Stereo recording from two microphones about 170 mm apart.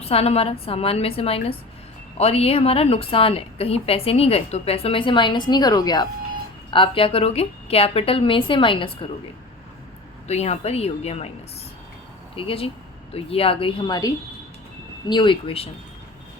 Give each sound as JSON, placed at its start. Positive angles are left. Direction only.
{"t": 0.0, "sound": "a woman's voice", "side_deg": 35}
{"t": 10.2, "sound": "a woman's voice", "side_deg": 40}
{"t": 12.4, "sound": "a woman's voice", "side_deg": 35}